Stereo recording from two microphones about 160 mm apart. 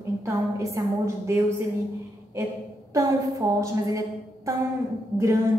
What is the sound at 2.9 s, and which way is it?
A woman's voice, 20° right (ahead or behind).